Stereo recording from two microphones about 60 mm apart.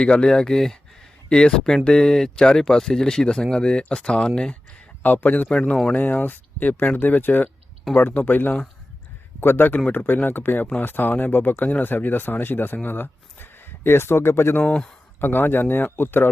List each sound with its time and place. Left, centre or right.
0.0 s speech: centre
5.0 s speech: left
5.5 s speech: centre
5.9 s speech: left
14.6 s speech: centre
15.2 s speech: left